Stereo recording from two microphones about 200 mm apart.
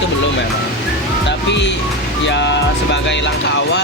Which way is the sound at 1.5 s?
60° left (ahead or behind).